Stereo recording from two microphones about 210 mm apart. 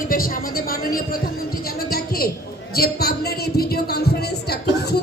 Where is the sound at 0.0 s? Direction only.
45° left (ahead or behind).